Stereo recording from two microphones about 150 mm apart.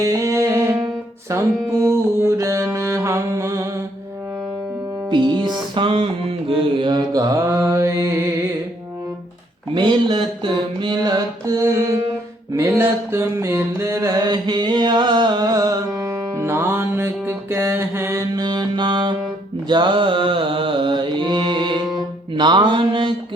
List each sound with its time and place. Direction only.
0.0 s music: 20° right (ahead or behind)
5.1 s music: 30° right (ahead or behind)
6.5 s mantra: 35° right (ahead or behind)
9.7 s mantra: 30° right (ahead or behind)